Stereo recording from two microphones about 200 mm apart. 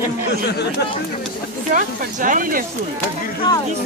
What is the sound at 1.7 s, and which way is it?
Speech, 40° right (ahead or behind).